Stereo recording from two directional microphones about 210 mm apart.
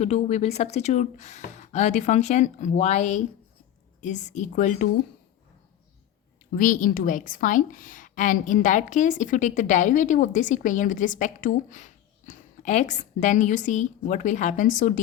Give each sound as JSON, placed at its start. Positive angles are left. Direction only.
{"t": 0.0, "sound": "a woman's voice", "side_deg": 30}
{"t": 6.6, "sound": "a woman's voice", "side_deg": 40}